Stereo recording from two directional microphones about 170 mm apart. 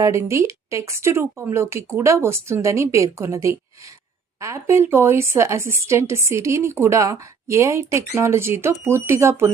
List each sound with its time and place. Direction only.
0.0 s a woman's voice: 15° right (ahead or behind)